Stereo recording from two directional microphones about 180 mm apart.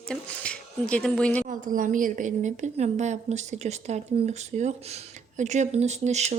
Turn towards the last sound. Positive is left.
turn(degrees=-40)  # may be behind; listen again after turning